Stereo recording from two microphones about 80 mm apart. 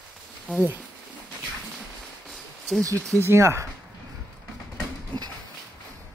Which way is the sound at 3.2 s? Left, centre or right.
Right.